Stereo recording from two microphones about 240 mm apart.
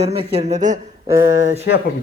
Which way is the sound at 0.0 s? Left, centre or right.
Right.